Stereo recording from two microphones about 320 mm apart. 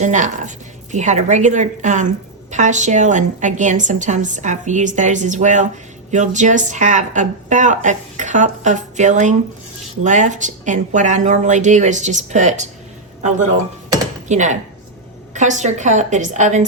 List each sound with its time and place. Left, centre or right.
0.0 s a woman's voice: right
13.9 s a sound: right
15.4 s speech: right